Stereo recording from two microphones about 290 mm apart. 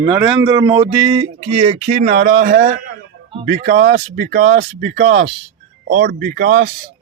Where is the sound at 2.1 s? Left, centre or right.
Right.